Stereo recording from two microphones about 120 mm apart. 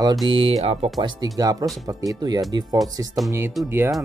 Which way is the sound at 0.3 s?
50° right (ahead or behind).